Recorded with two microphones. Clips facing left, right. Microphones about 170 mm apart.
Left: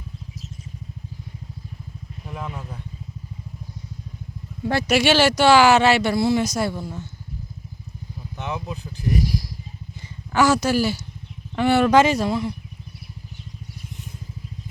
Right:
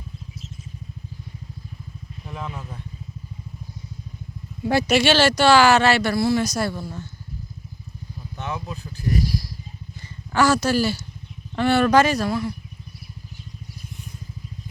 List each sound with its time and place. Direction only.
2.3 s speech: 10° left (ahead or behind)
4.9 s speech: 15° left (ahead or behind)
8.4 s speech: 15° left (ahead or behind)